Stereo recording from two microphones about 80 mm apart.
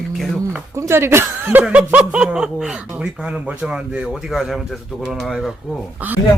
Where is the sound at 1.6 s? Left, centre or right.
Centre.